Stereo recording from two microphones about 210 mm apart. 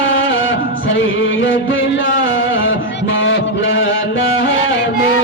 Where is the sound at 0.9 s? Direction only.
65° left (ahead or behind).